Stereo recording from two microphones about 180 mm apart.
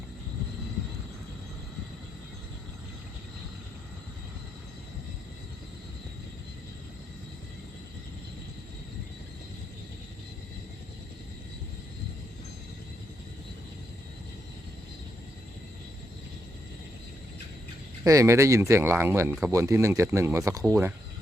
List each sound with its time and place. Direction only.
18.0 s speech: 15° right (ahead or behind)